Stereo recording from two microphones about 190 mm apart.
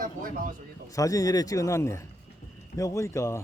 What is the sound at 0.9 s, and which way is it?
Speech, 15° left (ahead or behind).